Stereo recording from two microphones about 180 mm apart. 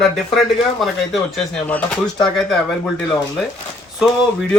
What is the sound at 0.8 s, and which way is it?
Speech, centre (ahead or behind).